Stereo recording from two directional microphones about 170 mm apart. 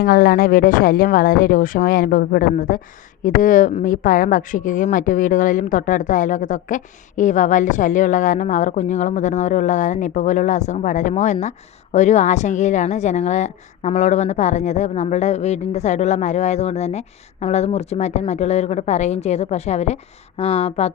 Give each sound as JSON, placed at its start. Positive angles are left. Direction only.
{"t": 0.0, "sound": "speech", "side_deg": 65}